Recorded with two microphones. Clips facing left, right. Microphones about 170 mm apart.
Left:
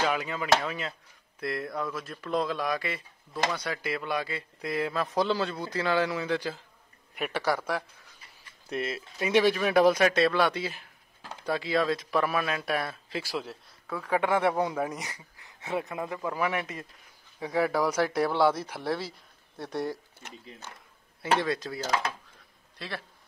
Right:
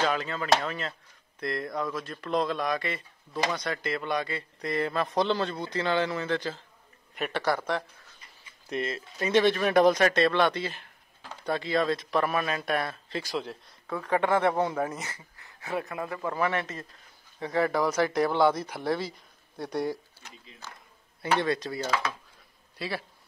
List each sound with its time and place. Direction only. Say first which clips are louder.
0.0 s speech: right 1 dB; 10° left (ahead or behind)
16.2 s speech: right 2 dB; 5° left (ahead or behind)
21.2 s speech: right 1 dB; centre (ahead or behind)